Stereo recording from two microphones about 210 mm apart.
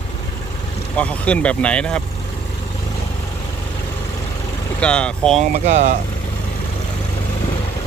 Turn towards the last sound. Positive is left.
turn(degrees=-35)  # may be behind; listen again after turning